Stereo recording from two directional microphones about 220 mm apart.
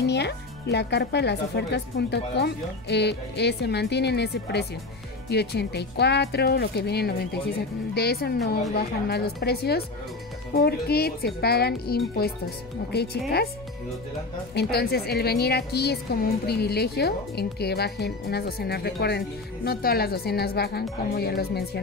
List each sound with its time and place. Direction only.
0.0 s a woman's voice: 50° left (ahead or behind)
14.5 s a woman's voice: 45° left (ahead or behind)